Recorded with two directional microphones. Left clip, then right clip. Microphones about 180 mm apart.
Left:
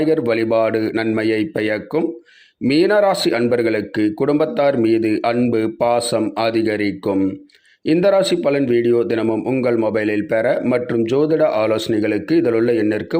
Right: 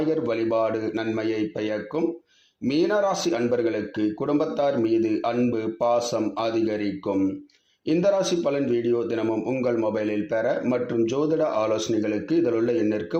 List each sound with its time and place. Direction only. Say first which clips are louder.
0.0 s a man's voice: left 7 dB; 40° left (ahead or behind)